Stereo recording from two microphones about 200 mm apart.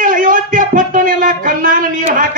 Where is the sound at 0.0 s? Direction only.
40° right (ahead or behind).